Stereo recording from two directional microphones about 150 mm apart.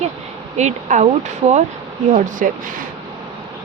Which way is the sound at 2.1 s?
60° right (ahead or behind).